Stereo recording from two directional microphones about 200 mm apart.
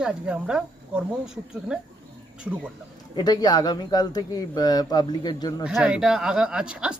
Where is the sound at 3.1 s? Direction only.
20° left (ahead or behind).